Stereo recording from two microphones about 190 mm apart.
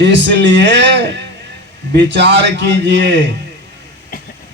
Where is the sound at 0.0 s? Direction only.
65° right (ahead or behind).